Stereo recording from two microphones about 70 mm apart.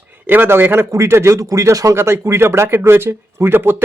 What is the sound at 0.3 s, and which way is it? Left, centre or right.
Speech, right.